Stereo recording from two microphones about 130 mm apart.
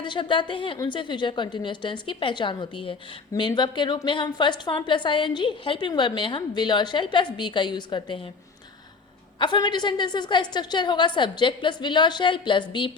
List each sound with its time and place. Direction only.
0.0 s a woman's voice: 40° left (ahead or behind)
9.4 s a woman's voice: 35° left (ahead or behind)